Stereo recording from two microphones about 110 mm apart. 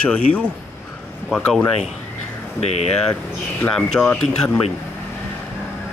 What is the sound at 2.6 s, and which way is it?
Speech, 80° left.